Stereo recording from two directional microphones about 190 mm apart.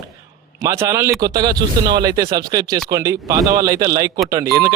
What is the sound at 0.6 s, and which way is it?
Speech, 15° right (ahead or behind).